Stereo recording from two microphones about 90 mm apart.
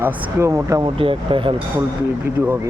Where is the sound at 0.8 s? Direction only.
80° right.